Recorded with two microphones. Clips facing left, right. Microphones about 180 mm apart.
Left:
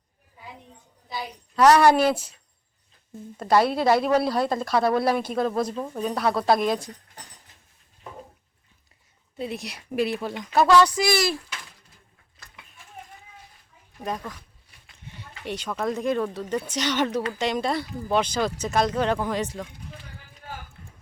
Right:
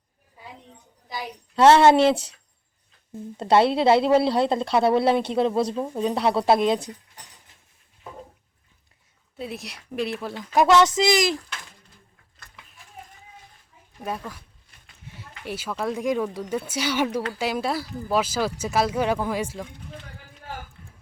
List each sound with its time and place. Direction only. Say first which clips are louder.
1.5 s speech: right 2 dB; 25° right (ahead or behind)
3.3 s speech: right 2 dB; 25° right (ahead or behind)
9.4 s a woman's voice: left 2 dB; centre (ahead or behind)
10.5 s speech: right 1 dB; 20° right (ahead or behind)
14.0 s speech: even; 5° right (ahead or behind)